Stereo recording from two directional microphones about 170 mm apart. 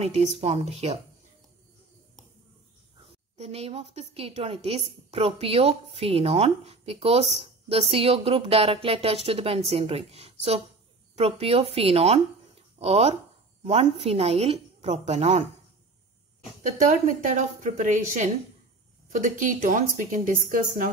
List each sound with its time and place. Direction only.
0.0 s a woman's voice: 40° right (ahead or behind)
3.3 s a woman's voice: 35° right (ahead or behind)
7.3 s a sound: 35° right (ahead or behind)
7.9 s a woman's voice: 35° right (ahead or behind)
16.7 s a woman's voice: 45° right (ahead or behind)